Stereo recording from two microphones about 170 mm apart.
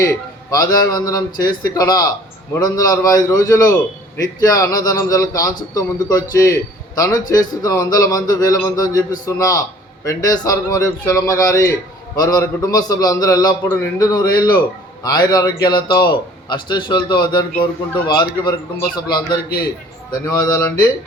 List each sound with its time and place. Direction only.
0.0 s a man's voice: 20° left (ahead or behind)
18.9 s a man's voice: 25° left (ahead or behind)